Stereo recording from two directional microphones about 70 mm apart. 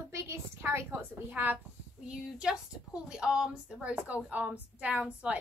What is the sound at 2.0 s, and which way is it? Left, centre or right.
A woman's voice, centre.